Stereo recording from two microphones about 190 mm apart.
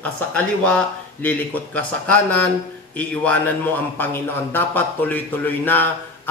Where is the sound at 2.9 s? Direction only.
5° left (ahead or behind).